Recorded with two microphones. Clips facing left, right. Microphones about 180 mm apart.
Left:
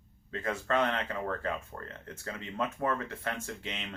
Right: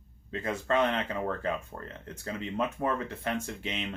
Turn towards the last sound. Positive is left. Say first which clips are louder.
# right 5 dB
turn(degrees=-20)  # may be behind; listen again after turning